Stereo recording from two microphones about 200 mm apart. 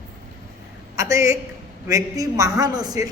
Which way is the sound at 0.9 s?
15° right (ahead or behind).